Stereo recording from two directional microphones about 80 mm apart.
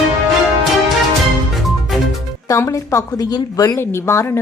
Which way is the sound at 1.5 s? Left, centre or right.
Centre.